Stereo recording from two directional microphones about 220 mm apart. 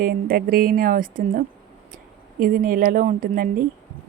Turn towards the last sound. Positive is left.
turn(degrees=-35)  # may be behind; listen again after turning